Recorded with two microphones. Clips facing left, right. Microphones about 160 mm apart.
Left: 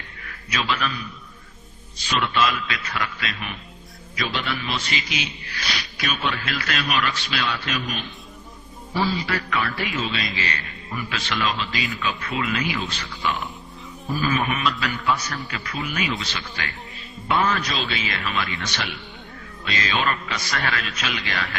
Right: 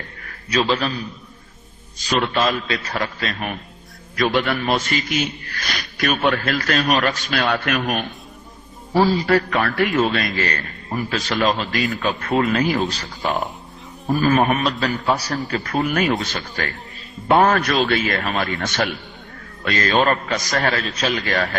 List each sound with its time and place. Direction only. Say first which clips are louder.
0.3 s a man's voice: right 7 dB; 35° right (ahead or behind); by 8.0 s 60° right (ahead or behind)
9.0 s a man's voice: right 8 dB; 40° right (ahead or behind)